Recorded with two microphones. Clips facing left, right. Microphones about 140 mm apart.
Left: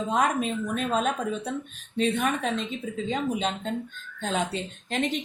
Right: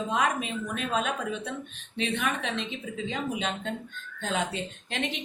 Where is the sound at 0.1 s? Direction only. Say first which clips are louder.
Left 4 dB; 45° left (ahead or behind).